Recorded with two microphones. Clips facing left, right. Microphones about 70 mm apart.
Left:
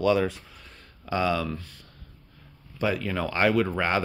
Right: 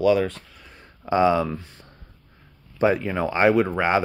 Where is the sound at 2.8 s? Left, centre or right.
Right.